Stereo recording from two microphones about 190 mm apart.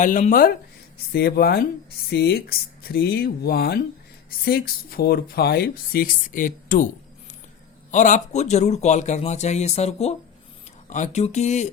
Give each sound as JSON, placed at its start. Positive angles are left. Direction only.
{"t": 0.0, "sound": "speech", "side_deg": 45}
{"t": 7.9, "sound": "a man's voice", "side_deg": 40}